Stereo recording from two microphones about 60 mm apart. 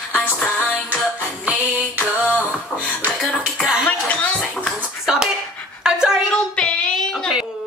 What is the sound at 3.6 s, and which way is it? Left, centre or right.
Music, centre.